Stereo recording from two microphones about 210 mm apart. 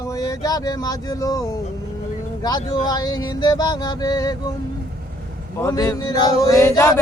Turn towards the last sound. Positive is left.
turn(degrees=15)  # may be behind; listen again after turning